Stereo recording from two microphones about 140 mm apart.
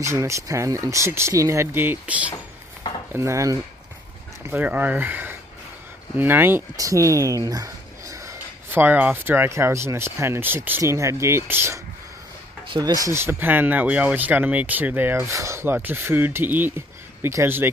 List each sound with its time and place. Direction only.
0.0 s speech: 20° right (ahead or behind)
3.1 s speech: 20° right (ahead or behind)
12.7 s speech: 25° right (ahead or behind)